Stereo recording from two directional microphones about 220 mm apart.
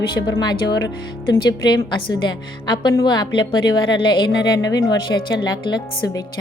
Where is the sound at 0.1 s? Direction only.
20° left (ahead or behind).